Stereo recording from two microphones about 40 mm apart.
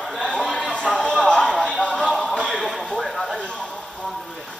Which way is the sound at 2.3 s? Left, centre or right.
Centre.